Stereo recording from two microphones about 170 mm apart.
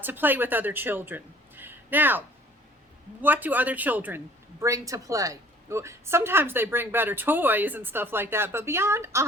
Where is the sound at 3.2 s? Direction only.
10° right (ahead or behind).